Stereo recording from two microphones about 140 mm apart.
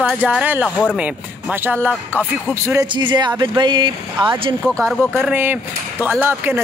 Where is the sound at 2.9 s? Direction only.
35° right (ahead or behind).